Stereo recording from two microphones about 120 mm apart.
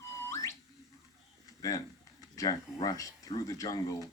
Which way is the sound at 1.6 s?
30° left (ahead or behind).